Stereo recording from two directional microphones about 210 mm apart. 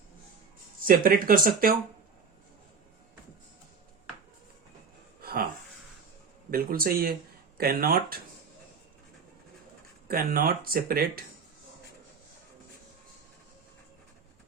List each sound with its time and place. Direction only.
0.9 s speech: 40° right (ahead or behind)
5.2 s a sound: 45° right (ahead or behind)
6.5 s speech: 45° right (ahead or behind)
10.1 s speech: 45° right (ahead or behind)